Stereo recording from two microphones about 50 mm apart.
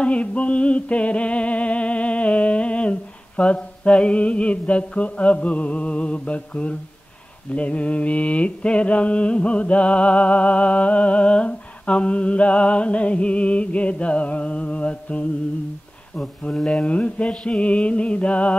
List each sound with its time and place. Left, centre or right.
0.0 s mantra: left
16.4 s mantra: centre